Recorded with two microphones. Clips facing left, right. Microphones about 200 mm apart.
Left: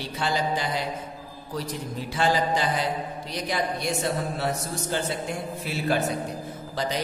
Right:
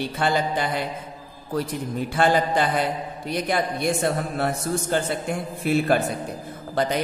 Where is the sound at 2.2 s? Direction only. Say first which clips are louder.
Right 3 dB; 55° right (ahead or behind).